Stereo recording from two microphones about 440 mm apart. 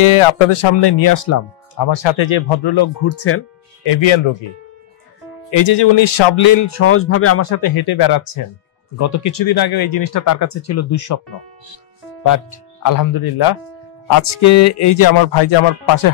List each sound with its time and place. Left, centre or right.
0.0 s speech: left
1.8 s speech: left
3.1 s speech: left
3.8 s speech: left
5.5 s speech: left
5.8 s speech: left
6.6 s speech: left
8.9 s speech: left
12.8 s speech: left